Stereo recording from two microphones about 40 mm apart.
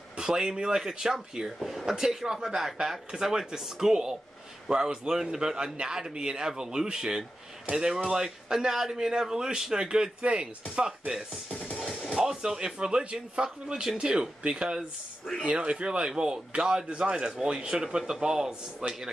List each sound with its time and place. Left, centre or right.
0.2 s a man's voice: centre
1.6 s a sound: centre
1.9 s a man's voice: centre
10.9 s a man's voice: centre